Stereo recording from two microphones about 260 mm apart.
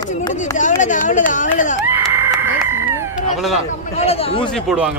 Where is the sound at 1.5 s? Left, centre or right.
Left.